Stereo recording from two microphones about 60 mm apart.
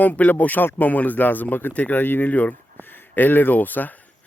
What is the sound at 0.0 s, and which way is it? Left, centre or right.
Speech, left.